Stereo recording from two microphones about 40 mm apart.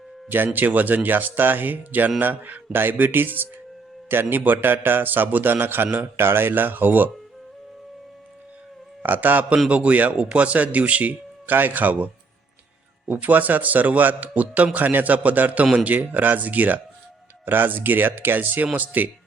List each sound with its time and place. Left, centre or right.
0.3 s a man's voice: right
6.1 s a man's voice: right
9.0 s speech: right
9.6 s speech: right
11.4 s speech: right
13.1 s speech: right
17.4 s speech: right